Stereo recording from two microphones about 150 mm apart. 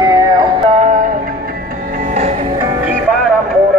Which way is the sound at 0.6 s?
45° right (ahead or behind).